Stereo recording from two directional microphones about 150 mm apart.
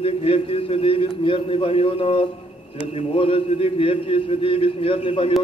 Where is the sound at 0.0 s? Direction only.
40° left (ahead or behind).